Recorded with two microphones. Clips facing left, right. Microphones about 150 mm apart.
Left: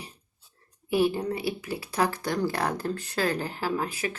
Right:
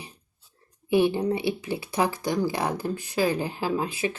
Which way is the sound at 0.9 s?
20° right (ahead or behind).